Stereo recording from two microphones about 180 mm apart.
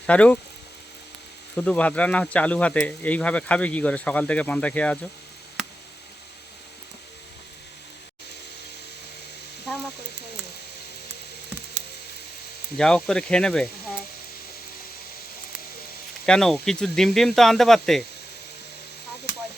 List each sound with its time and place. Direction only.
0.1 s speech: 5° left (ahead or behind)
1.5 s speech: 5° left (ahead or behind)
12.7 s speech: 5° left (ahead or behind)
16.2 s speech: 5° left (ahead or behind)